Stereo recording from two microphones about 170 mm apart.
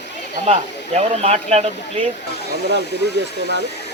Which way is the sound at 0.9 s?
40° right (ahead or behind).